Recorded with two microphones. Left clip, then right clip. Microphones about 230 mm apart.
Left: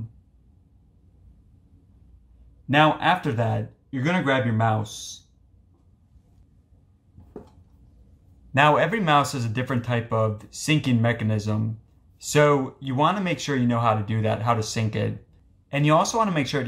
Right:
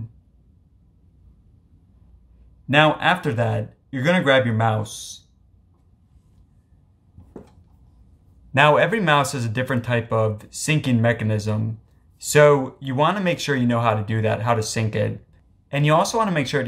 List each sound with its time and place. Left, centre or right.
2.7 s speech: centre
8.5 s speech: centre